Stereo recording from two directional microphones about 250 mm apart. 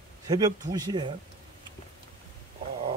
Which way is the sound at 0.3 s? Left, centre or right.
Centre.